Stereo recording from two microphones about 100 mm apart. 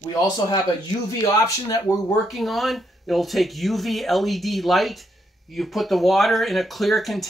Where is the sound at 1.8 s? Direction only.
Centre (ahead or behind).